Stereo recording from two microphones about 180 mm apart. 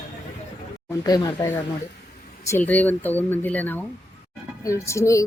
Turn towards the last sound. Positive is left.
turn(degrees=15)  # may be behind; listen again after turning